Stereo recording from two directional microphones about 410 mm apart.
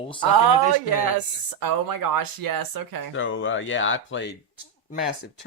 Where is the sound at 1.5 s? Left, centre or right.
Right.